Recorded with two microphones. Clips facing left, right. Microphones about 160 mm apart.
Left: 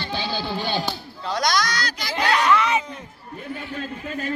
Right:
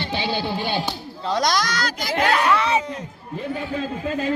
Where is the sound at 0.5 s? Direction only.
5° right (ahead or behind).